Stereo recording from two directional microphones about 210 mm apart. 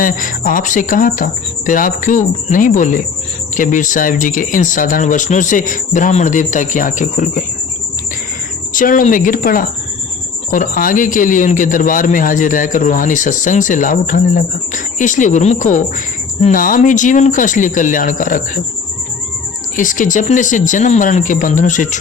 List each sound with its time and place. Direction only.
0.0 s a man's voice: 40° left (ahead or behind)
8.7 s a man's voice: 40° left (ahead or behind)
19.7 s a man's voice: 40° left (ahead or behind)